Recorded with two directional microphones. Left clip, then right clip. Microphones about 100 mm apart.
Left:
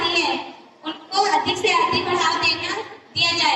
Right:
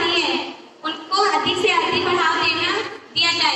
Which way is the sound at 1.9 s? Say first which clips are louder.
Right 2 dB; 30° left (ahead or behind).